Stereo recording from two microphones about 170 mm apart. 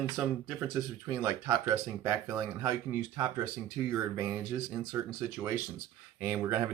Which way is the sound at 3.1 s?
20° right (ahead or behind).